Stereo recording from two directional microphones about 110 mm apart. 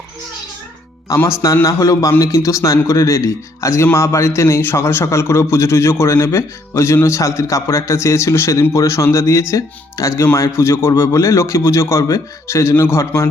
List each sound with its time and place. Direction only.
1.0 s a man's voice: 25° left (ahead or behind)